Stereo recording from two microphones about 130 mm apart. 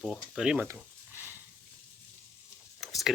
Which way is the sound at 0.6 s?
20° right (ahead or behind).